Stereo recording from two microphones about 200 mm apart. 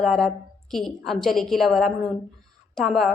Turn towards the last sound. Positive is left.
turn(degrees=0)  # may be behind; listen again after turning